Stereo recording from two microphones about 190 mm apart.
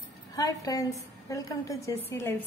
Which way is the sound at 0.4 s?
20° left (ahead or behind).